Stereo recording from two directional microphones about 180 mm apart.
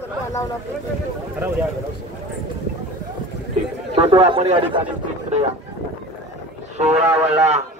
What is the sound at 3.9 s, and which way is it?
Speech, 30° right (ahead or behind).